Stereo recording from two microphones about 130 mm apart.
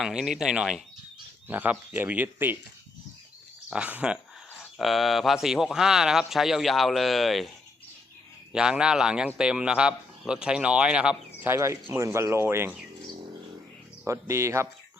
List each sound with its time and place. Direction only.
0.0 s a man's voice: 5° right (ahead or behind)
3.7 s a man's voice: 10° right (ahead or behind)
8.5 s a man's voice: 5° right (ahead or behind)
11.4 s speech: 20° right (ahead or behind)
14.0 s speech: 20° right (ahead or behind)